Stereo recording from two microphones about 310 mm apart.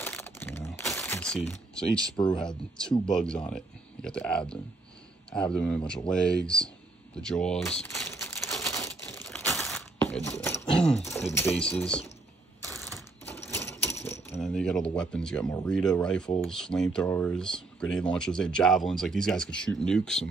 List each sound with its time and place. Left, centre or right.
0.0 s typing: centre
2.3 s speech: centre
7.2 s typewriter: centre
10.6 s a sound: centre
11.1 s speech: centre
12.6 s typewriter: centre
16.3 s speech: centre